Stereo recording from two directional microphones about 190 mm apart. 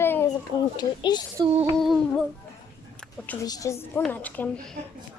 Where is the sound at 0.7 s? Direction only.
20° left (ahead or behind).